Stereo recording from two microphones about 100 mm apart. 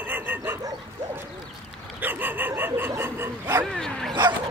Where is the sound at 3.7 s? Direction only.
5° left (ahead or behind).